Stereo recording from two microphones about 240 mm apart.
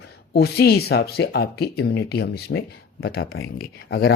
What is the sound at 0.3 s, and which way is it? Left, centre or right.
Speech, left.